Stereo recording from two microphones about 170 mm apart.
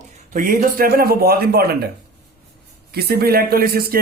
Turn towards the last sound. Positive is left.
turn(degrees=-65)  # may be behind; listen again after turning